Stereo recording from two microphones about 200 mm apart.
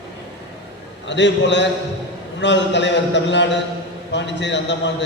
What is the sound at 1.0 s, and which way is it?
A man's voice, 60° left (ahead or behind).